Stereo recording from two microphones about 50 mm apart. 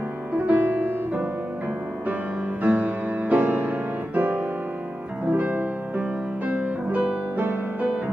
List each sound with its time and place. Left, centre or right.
0.5 s music: right
2.6 s music: right
7.3 s music: right